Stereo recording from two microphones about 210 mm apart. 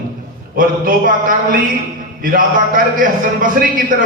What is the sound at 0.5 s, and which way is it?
A man's voice, 40° right (ahead or behind).